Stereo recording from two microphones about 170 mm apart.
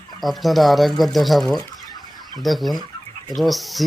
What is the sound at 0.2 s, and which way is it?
Speech, centre (ahead or behind).